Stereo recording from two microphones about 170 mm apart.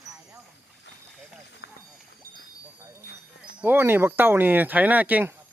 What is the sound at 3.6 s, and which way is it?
Speech, 10° right (ahead or behind).